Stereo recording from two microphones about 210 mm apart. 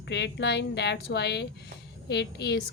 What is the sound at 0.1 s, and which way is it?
A woman's voice, 55° left (ahead or behind).